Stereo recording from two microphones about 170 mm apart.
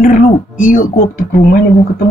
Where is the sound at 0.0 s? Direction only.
50° left (ahead or behind).